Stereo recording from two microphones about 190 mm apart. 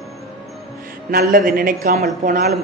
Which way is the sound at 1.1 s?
50° right (ahead or behind).